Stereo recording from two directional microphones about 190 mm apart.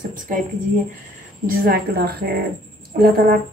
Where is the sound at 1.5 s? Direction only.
50° right (ahead or behind).